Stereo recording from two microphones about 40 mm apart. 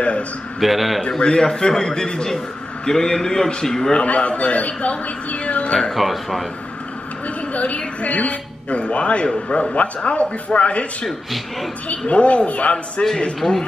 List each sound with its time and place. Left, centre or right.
0.6 s speech: centre
1.0 s a man's voice: left
3.9 s a man's voice: left
5.9 s speech: centre
7.2 s a woman's voice: left
11.1 s speech: centre
12.1 s a man's voice: left
13.4 s a man's voice: centre